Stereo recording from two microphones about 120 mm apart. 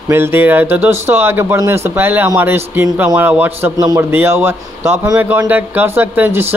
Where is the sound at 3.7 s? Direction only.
30° right (ahead or behind).